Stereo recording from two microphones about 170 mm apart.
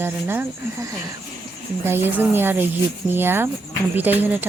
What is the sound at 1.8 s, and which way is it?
Speech, 15° right (ahead or behind).